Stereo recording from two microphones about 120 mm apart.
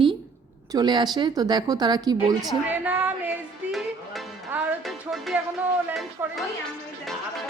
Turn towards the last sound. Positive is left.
turn(degrees=-20)  # may be behind; listen again after turning